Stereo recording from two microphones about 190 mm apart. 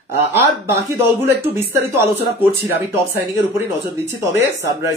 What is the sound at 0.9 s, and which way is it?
Speech, 10° right (ahead or behind).